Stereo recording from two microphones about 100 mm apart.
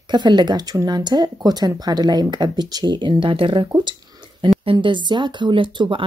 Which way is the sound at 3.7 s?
45° right (ahead or behind).